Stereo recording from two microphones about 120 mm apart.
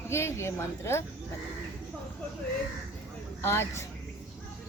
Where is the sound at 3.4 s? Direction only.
20° left (ahead or behind).